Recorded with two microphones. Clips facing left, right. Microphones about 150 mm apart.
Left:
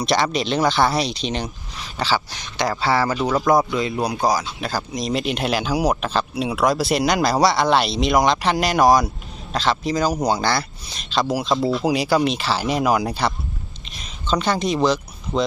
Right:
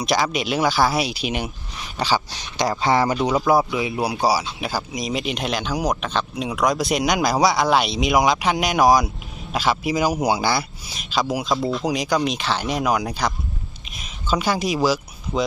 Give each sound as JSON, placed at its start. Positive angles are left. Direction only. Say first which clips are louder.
{"t": 0.0, "sound": "speech", "louder": "left 1 dB", "side_deg": 0}
{"t": 3.2, "sound": "speech", "louder": "left 1 dB", "side_deg": -5}